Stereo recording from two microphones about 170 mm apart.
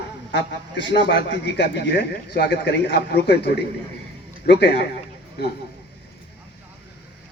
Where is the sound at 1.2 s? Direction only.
80° left.